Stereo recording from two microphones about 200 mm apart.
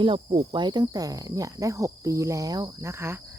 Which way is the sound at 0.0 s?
25° right (ahead or behind).